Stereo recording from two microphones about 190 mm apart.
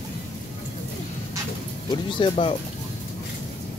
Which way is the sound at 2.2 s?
25° left (ahead or behind).